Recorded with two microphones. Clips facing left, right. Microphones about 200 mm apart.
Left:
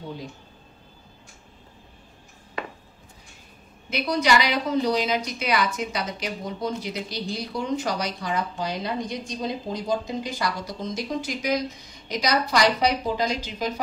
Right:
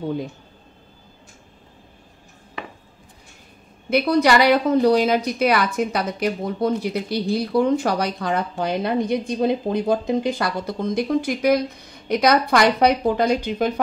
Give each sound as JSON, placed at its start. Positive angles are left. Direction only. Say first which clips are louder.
{"t": 3.9, "sound": "speech", "louder": "right 6 dB", "side_deg": -55}